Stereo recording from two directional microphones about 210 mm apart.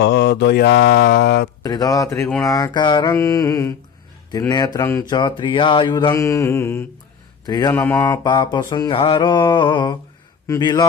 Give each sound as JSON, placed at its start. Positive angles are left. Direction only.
{"t": 0.0, "sound": "mantra", "side_deg": 50}
{"t": 1.6, "sound": "mantra", "side_deg": 20}
{"t": 4.3, "sound": "speech", "side_deg": 20}
{"t": 7.7, "sound": "mantra", "side_deg": 10}
{"t": 8.2, "sound": "a man's voice", "side_deg": 20}